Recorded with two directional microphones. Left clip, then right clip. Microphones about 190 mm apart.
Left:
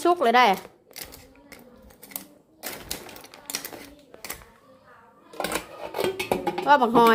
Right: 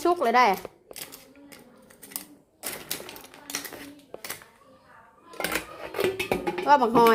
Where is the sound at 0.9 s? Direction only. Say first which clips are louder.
Left 1 dB; 20° left (ahead or behind).